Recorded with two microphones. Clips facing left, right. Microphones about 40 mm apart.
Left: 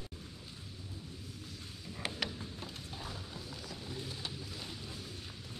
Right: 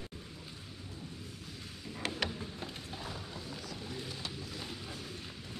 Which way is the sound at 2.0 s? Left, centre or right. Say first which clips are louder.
Right 2 dB; centre.